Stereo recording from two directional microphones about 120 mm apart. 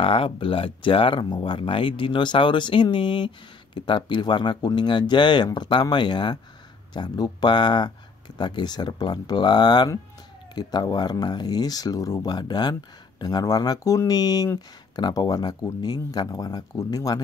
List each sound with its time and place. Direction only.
0.0 s speech: 50° left (ahead or behind); by 17.2 s 30° left (ahead or behind)